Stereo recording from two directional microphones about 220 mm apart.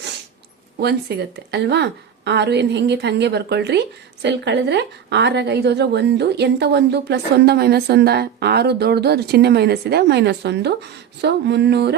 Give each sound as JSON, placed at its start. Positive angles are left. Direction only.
{"t": 0.8, "sound": "a woman's voice", "side_deg": -50}